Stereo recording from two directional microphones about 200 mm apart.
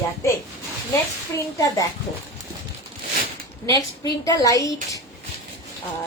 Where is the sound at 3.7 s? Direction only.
15° left (ahead or behind).